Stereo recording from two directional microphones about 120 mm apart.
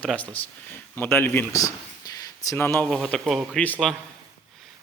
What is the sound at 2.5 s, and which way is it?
A man's voice, 15° left (ahead or behind).